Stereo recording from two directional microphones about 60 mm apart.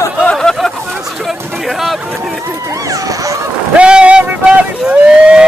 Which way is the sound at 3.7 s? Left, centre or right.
Centre.